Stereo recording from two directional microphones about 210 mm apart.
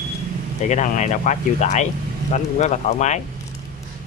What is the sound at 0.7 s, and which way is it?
Speech, 35° left (ahead or behind).